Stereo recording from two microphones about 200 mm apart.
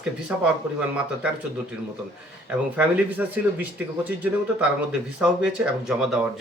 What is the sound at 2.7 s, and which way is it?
Speech, 10° right (ahead or behind).